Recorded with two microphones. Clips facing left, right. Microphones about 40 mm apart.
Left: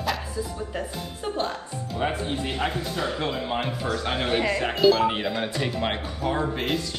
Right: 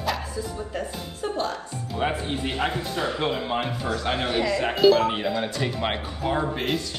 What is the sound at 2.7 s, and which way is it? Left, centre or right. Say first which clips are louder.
Speech: right 1 dB; right.